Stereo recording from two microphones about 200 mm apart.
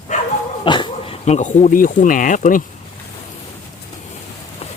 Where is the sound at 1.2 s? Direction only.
35° left (ahead or behind).